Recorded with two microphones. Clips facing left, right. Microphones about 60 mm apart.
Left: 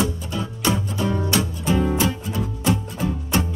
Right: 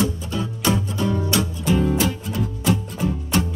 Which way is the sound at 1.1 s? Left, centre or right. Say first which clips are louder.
Even; left.